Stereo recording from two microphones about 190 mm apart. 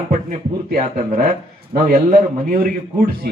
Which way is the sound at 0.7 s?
50° right (ahead or behind).